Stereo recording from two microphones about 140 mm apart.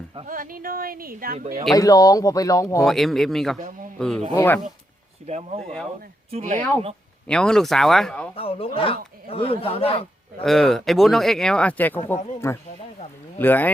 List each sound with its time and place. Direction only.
0.3 s speech: 85° right
1.7 s speech: 25° left (ahead or behind)
2.8 s speech: centre (ahead or behind)
5.2 s speech: 50° right (ahead or behind)
6.6 s speech: 10° left (ahead or behind)
8.4 s a man's voice: 45° left (ahead or behind)
10.4 s speech: centre (ahead or behind)